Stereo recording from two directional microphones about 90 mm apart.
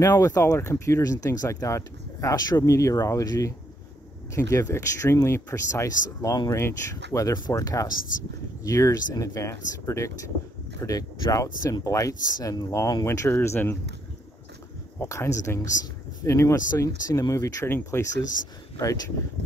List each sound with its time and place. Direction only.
0.0 s speech: 35° left (ahead or behind)
6.5 s speech: 35° left (ahead or behind)
7.3 s speech: 45° left (ahead or behind)
13.3 s speech: 25° left (ahead or behind)
15.0 s speech: 35° left (ahead or behind)